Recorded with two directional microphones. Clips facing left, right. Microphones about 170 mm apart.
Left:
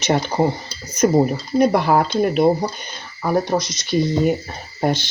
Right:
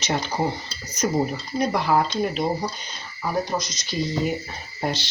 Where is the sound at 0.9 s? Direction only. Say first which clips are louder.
Left 7 dB; 55° left (ahead or behind).